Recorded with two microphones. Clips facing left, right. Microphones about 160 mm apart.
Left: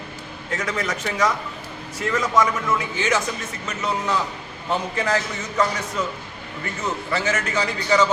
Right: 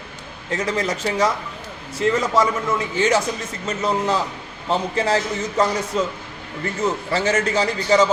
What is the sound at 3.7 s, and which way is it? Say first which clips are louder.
A man's voice: right 4 dB; 35° right (ahead or behind).